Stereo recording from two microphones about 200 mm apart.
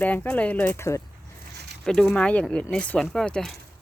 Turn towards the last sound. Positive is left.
turn(degrees=5)  # may be behind; listen again after turning